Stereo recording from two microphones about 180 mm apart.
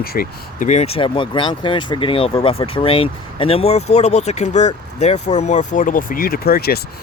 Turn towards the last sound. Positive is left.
turn(degrees=60)  # may be behind; listen again after turning